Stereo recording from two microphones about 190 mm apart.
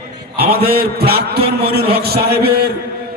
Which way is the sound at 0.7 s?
55° right (ahead or behind).